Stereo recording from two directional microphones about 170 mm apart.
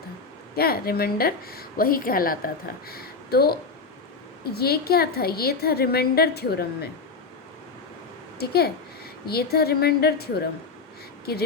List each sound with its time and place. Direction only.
0.5 s a woman's voice: 65° left (ahead or behind)
8.4 s a woman's voice: 65° left (ahead or behind)